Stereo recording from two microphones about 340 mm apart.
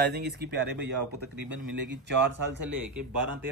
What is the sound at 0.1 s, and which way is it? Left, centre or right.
Speech, right.